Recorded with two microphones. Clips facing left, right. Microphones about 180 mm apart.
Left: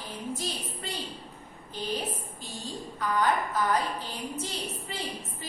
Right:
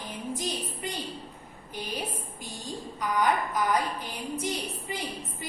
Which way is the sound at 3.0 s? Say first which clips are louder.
Even; 15° right (ahead or behind).